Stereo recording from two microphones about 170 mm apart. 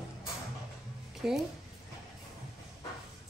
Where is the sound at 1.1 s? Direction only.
5° right (ahead or behind).